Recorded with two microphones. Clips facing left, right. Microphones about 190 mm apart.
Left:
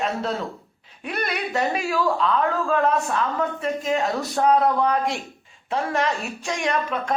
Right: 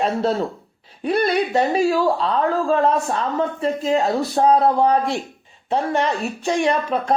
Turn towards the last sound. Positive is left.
turn(degrees=-35)  # may be behind; listen again after turning